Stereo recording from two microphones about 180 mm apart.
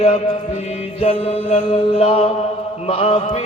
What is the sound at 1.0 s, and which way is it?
Music, 35° left (ahead or behind).